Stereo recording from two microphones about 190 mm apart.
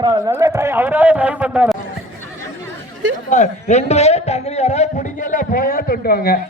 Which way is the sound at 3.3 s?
35° left (ahead or behind).